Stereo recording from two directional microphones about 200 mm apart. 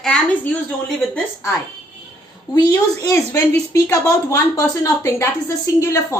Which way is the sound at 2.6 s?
15° left (ahead or behind).